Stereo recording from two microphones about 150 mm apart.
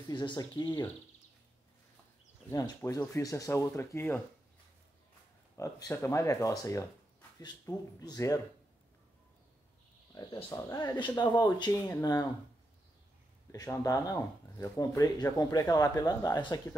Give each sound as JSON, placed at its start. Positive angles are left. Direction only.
{"t": 0.1, "sound": "speech", "side_deg": 30}
{"t": 2.5, "sound": "speech", "side_deg": 25}
{"t": 5.6, "sound": "speech", "side_deg": 20}
{"t": 10.1, "sound": "speech", "side_deg": 25}
{"t": 13.5, "sound": "speech", "side_deg": 25}